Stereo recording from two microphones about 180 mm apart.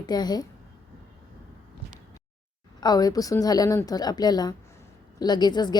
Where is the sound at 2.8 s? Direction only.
20° left (ahead or behind).